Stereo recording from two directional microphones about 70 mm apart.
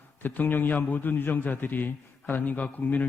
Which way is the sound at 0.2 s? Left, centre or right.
Left.